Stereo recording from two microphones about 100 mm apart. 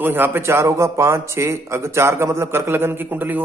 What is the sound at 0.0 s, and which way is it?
A man's voice, 20° right (ahead or behind).